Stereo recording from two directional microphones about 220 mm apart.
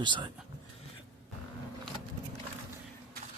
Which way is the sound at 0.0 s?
20° right (ahead or behind).